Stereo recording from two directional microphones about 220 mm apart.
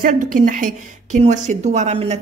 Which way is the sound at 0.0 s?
35° right (ahead or behind).